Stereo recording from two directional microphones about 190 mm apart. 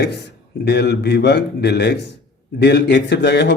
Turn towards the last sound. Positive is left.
turn(degrees=65)  # may be behind; listen again after turning